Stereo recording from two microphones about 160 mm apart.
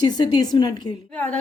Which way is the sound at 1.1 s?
10° left (ahead or behind).